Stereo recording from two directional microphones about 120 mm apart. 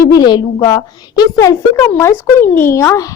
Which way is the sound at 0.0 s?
35° left (ahead or behind).